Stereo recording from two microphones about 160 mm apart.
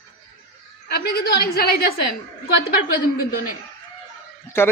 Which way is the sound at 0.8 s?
85° left.